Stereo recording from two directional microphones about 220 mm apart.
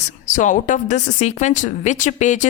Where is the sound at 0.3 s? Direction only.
35° left (ahead or behind).